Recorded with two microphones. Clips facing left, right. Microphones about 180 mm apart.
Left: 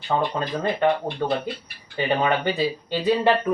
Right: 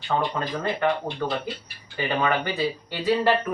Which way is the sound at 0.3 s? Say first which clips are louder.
Left 3 dB; 20° left (ahead or behind).